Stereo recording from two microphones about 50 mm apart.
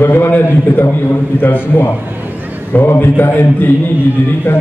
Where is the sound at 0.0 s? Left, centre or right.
Left.